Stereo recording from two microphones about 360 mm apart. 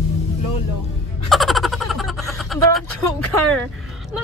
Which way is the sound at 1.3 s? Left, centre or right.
Centre.